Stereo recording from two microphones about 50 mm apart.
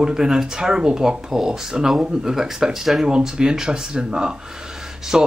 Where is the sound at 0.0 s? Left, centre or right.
Centre.